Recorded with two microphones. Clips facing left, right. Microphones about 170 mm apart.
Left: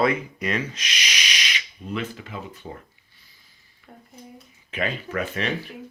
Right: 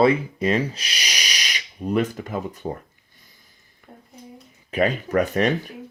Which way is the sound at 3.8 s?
50° right (ahead or behind).